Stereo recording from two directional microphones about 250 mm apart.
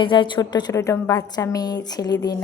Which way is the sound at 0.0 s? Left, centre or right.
Centre.